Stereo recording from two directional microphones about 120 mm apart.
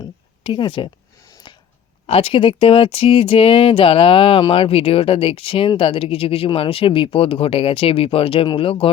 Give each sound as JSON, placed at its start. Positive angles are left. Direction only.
{"t": 0.4, "sound": "speech", "side_deg": 45}
{"t": 1.5, "sound": "a sound", "side_deg": 40}
{"t": 2.0, "sound": "speech", "side_deg": 55}